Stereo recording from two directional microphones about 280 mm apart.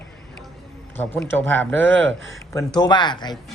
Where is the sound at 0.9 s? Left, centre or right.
Centre.